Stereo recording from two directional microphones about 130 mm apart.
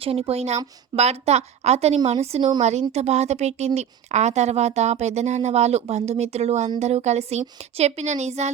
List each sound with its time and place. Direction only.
0.0 s a woman's voice: 45° right (ahead or behind)